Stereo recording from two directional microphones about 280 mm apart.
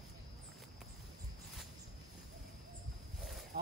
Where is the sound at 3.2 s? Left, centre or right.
Centre.